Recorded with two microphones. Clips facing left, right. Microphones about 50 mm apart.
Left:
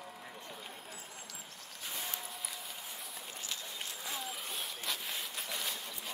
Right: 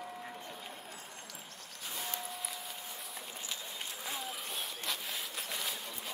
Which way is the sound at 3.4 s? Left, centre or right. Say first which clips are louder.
Even; centre.